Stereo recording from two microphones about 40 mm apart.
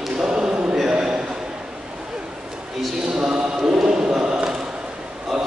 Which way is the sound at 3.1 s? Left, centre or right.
Right.